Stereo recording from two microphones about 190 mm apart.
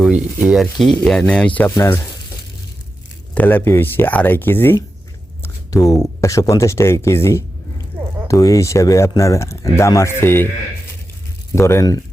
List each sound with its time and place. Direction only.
0.0 s speech: 5° right (ahead or behind); by 2.0 s 15° left (ahead or behind)
3.3 s speech: 10° left (ahead or behind)
5.4 s a sound: 20° left (ahead or behind)
6.1 s speech: 15° left (ahead or behind)
11.5 s speech: 15° left (ahead or behind)